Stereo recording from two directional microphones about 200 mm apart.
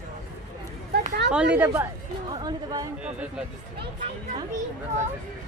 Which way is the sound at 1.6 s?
10° right (ahead or behind).